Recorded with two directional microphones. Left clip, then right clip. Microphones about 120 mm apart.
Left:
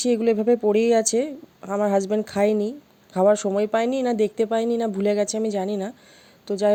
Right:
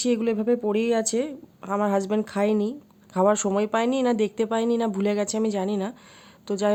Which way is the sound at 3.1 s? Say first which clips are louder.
Left 3 dB; 25° left (ahead or behind).